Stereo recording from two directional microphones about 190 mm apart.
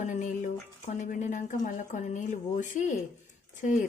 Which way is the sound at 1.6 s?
40° left (ahead or behind).